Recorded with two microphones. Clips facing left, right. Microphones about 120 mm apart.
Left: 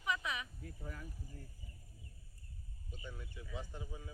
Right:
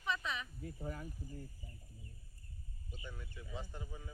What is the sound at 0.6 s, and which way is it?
Speech, 30° right (ahead or behind).